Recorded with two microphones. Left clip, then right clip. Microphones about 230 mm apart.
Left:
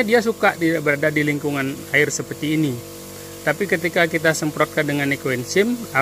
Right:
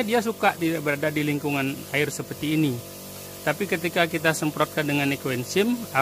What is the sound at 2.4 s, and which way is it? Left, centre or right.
Speech, left.